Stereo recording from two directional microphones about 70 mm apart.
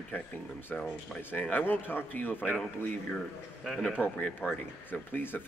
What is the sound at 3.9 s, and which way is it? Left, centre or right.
A man's voice, left.